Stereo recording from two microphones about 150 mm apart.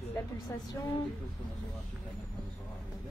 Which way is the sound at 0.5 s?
20° left (ahead or behind).